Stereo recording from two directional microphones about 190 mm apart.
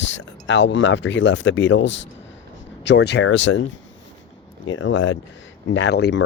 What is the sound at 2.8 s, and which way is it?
Speech, 60° left (ahead or behind).